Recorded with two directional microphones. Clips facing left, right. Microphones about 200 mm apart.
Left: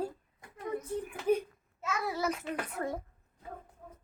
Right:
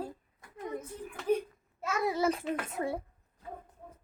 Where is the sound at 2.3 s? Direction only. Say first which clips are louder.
Right 3 dB; 30° right (ahead or behind).